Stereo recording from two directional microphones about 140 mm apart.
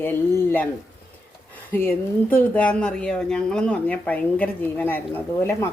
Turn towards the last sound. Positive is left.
turn(degrees=15)  # may be behind; listen again after turning